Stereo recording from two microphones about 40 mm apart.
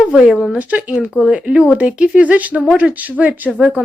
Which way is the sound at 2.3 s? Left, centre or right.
Right.